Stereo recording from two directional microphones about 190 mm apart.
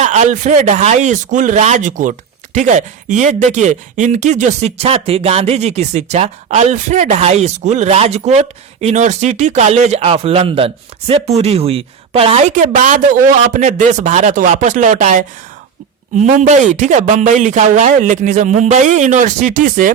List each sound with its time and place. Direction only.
0.0 s speech: 40° right (ahead or behind)